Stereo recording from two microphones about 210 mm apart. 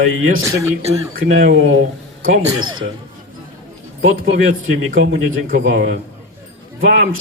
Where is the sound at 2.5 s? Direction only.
20° right (ahead or behind).